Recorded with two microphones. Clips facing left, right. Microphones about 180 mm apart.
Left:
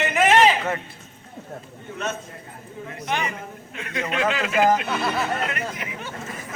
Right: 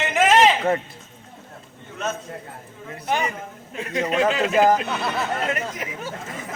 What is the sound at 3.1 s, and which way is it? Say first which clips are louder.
Speech: right 3 dB; 35° right (ahead or behind).